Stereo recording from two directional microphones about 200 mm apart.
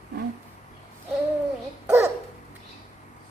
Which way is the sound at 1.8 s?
10° right (ahead or behind).